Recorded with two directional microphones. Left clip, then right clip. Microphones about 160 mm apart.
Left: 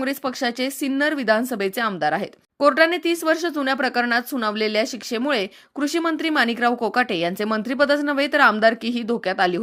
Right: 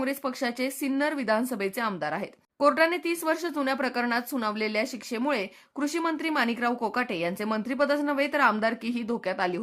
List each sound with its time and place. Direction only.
0.0 s speech: 25° left (ahead or behind)